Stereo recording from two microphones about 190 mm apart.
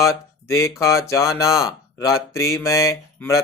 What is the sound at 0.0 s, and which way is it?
Speech, 15° left (ahead or behind).